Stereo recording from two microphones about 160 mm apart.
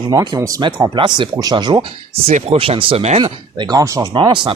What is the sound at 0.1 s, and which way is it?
Speech, 25° right (ahead or behind).